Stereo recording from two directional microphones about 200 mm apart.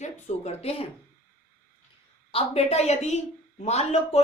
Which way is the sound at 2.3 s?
30° left (ahead or behind).